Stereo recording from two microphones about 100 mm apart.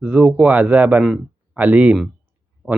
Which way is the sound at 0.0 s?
10° right (ahead or behind).